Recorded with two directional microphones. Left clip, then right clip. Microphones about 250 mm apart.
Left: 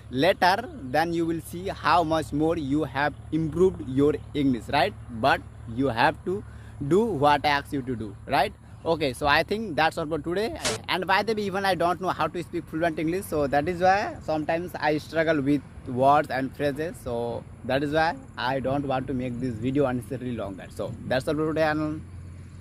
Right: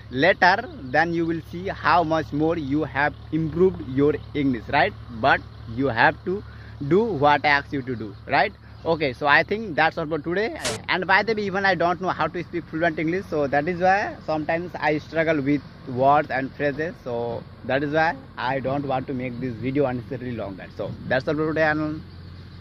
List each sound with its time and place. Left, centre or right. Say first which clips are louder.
0.1 s speech: right 4 dB; centre